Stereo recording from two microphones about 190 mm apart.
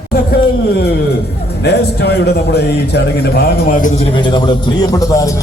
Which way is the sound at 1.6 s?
60° left (ahead or behind).